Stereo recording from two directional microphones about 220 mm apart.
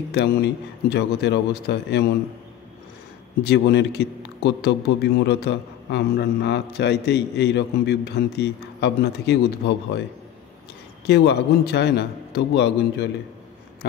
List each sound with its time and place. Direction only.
0.1 s a man's voice: 50° left (ahead or behind)
3.4 s a man's voice: 50° left (ahead or behind)
11.1 s a man's voice: 50° left (ahead or behind)